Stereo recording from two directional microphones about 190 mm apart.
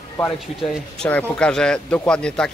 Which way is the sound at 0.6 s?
Centre (ahead or behind).